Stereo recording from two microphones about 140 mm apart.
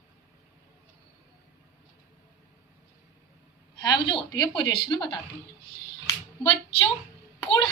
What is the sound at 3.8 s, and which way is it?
A woman's voice, 35° left (ahead or behind).